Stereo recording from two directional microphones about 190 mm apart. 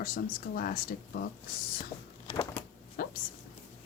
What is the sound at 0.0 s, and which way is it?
Speech, 50° left (ahead or behind).